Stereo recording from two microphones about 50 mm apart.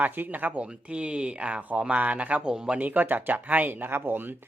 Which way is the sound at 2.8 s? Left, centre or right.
Right.